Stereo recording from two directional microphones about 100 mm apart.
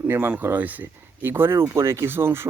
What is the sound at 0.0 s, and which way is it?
Speech, 20° right (ahead or behind).